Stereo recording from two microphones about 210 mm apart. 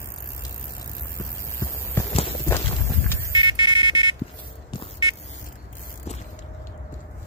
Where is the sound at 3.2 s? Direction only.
20° right (ahead or behind).